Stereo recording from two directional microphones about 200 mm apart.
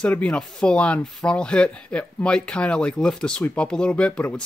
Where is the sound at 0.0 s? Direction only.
5° left (ahead or behind).